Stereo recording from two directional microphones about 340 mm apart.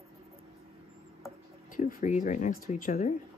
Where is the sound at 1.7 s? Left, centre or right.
Left.